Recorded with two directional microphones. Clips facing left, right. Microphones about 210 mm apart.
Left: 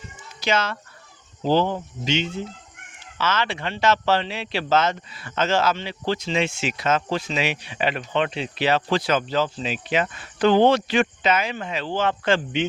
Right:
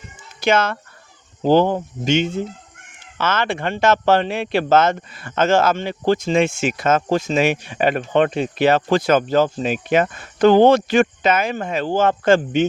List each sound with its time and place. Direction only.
0.4 s speech: 55° right (ahead or behind)